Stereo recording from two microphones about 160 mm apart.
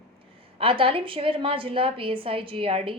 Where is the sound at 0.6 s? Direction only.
35° right (ahead or behind).